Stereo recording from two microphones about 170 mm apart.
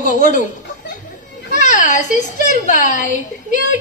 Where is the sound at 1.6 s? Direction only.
50° left (ahead or behind).